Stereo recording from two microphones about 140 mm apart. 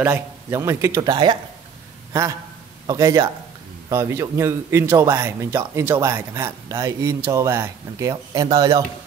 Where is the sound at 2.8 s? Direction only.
25° right (ahead or behind).